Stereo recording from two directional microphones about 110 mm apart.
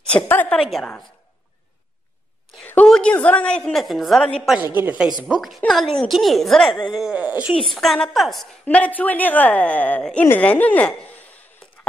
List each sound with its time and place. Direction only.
0.1 s speech: 15° left (ahead or behind)
2.6 s a sound: 15° left (ahead or behind)
2.9 s a woman's voice: 10° left (ahead or behind)
4.6 s speech: 20° right (ahead or behind)
5.0 s a woman's voice: 5° right (ahead or behind)
7.0 s speech: 10° right (ahead or behind)
7.7 s a woman's voice: centre (ahead or behind)
8.6 s speech: 15° left (ahead or behind)